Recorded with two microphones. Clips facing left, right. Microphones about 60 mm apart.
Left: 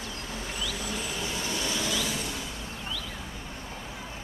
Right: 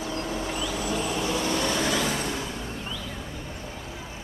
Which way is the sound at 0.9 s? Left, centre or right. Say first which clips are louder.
Right 7 dB; right.